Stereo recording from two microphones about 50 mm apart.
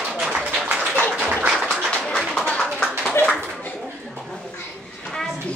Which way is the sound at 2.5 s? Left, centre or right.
Left.